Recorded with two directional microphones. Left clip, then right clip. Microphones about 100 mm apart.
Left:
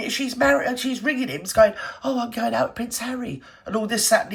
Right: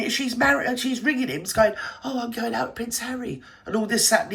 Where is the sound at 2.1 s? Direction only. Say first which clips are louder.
Left 5 dB; 50° left (ahead or behind).